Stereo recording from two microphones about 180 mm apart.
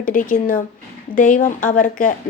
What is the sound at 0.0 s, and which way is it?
A woman's voice, 50° left (ahead or behind).